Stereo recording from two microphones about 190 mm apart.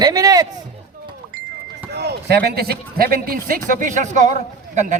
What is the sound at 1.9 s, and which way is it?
Run, 60° right (ahead or behind).